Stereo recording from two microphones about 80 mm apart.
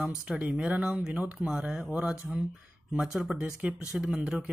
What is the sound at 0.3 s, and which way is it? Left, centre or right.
Speech, centre.